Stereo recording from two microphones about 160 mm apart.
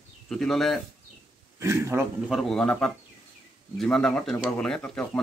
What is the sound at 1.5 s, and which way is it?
Speech, 15° right (ahead or behind).